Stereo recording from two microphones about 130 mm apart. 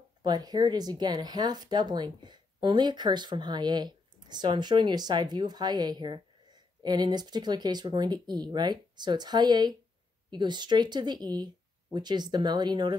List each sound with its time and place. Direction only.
0.2 s speech: 30° right (ahead or behind)